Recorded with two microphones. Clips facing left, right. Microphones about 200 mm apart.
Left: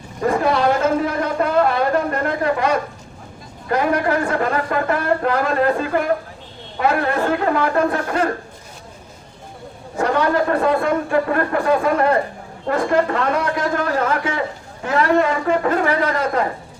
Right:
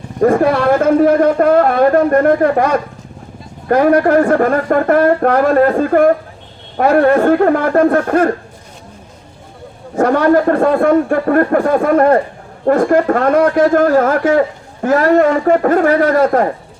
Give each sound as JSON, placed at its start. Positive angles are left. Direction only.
{"t": 0.2, "sound": "a man's voice", "side_deg": -50}
{"t": 3.7, "sound": "speech", "side_deg": -55}
{"t": 9.9, "sound": "speech", "side_deg": -50}